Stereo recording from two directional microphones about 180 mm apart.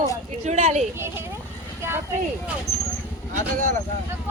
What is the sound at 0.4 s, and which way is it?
Speech, 40° right (ahead or behind).